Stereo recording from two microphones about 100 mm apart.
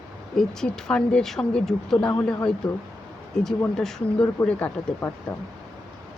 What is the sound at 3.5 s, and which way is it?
Speech, 5° left (ahead or behind).